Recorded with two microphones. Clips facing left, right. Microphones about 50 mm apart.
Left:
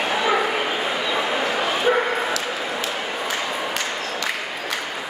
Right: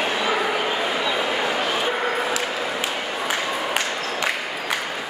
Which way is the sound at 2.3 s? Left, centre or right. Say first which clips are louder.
Right 1 dB; centre.